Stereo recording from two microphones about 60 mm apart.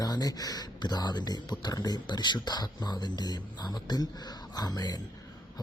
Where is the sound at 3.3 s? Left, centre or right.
Left.